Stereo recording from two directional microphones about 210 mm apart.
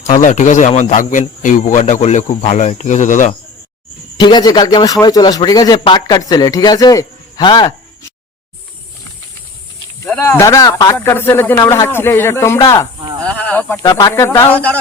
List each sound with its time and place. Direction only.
0.1 s speech: 35° left (ahead or behind)
4.2 s a man's voice: 20° left (ahead or behind)
10.1 s speech: 10° left (ahead or behind)